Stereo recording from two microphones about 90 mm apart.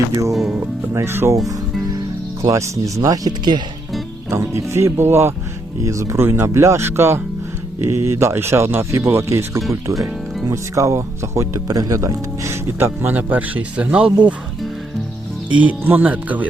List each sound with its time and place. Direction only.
0.1 s speech: 40° right (ahead or behind)
0.3 s speech: 5° right (ahead or behind)
0.9 s speech: 25° right (ahead or behind)
2.4 s speech: 35° right (ahead or behind)
4.3 s speech: 35° right (ahead or behind); by 14.3 s 15° right (ahead or behind)
15.5 s speech: 20° right (ahead or behind)